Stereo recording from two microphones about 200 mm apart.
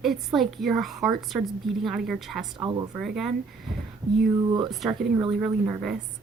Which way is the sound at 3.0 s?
Centre (ahead or behind).